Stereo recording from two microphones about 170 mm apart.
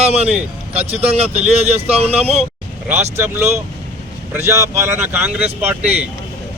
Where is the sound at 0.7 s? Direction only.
40° right (ahead or behind).